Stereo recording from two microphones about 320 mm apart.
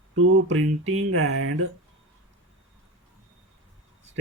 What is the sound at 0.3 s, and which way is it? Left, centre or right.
Speech, right.